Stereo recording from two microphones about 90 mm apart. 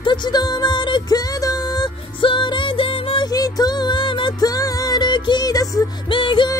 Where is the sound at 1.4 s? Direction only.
40° left (ahead or behind).